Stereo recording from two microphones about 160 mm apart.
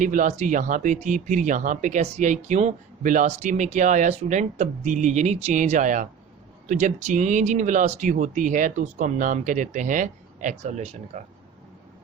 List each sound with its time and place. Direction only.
0.0 s speech: 55° right (ahead or behind)